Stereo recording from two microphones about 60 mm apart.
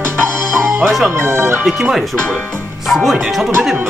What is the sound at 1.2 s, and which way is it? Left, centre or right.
Speech, right.